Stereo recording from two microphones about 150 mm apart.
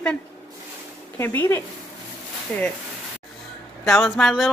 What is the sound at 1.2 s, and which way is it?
Speech, 15° left (ahead or behind).